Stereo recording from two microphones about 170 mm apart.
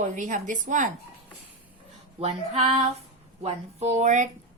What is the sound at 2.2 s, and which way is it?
A woman's voice, 40° right (ahead or behind).